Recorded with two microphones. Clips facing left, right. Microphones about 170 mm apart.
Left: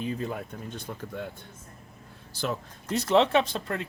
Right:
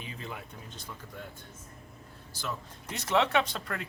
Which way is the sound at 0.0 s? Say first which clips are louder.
Left 10 dB; 45° left (ahead or behind).